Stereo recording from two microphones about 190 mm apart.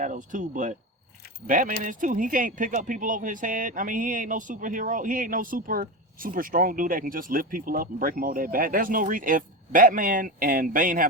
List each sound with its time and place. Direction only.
0.0 s speech: 45° right (ahead or behind)